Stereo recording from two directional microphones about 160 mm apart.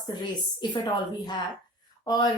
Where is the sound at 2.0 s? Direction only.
25° left (ahead or behind).